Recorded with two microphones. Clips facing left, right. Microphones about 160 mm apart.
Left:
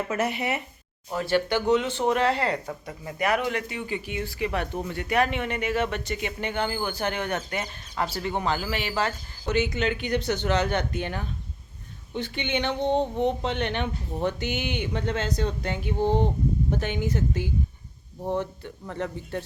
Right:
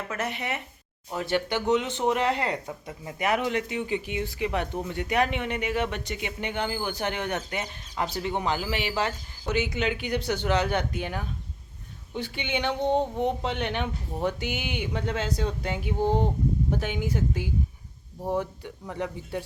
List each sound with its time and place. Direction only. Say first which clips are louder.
0.1 s speech: left 2 dB; 10° left (ahead or behind)
1.1 s speech: left 3 dB; 20° right (ahead or behind)